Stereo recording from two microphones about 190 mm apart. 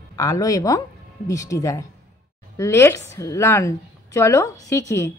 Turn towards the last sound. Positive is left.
turn(degrees=15)  # may be behind; listen again after turning